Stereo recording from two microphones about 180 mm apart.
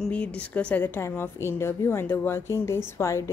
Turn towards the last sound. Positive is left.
turn(degrees=15)  # may be behind; listen again after turning